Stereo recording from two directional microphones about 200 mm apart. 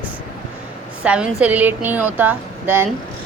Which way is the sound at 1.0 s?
5° right (ahead or behind).